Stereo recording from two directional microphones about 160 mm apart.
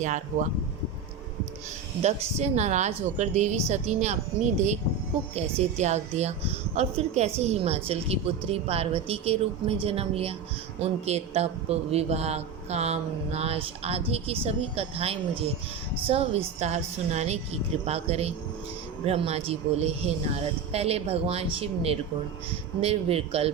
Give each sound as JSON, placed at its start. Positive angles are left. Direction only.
{"t": 2.0, "sound": "a woman's voice", "side_deg": -45}
{"t": 5.3, "sound": "a woman's voice", "side_deg": -40}